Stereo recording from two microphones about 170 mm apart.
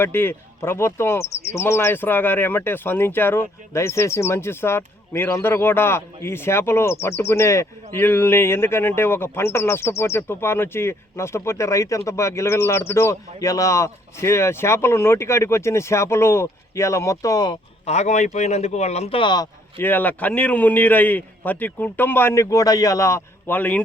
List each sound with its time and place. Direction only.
0.0 s speech: 15° left (ahead or behind)
17.8 s speech: 40° left (ahead or behind)
19.8 s speech: 10° left (ahead or behind)